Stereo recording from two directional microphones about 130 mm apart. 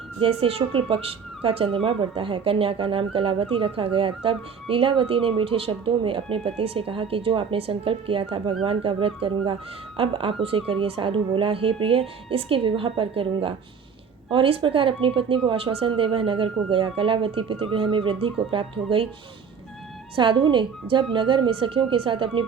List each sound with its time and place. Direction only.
0.2 s a woman's voice: 50° right (ahead or behind)
20.1 s a woman's voice: 40° right (ahead or behind)